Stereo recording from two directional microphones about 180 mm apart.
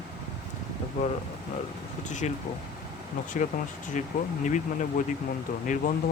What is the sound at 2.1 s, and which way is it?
Speech, 40° left (ahead or behind).